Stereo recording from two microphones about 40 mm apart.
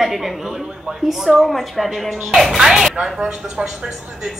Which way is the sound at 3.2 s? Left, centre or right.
Right.